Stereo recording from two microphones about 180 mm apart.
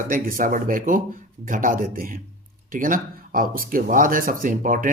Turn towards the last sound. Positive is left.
turn(degrees=-50)  # may be behind; listen again after turning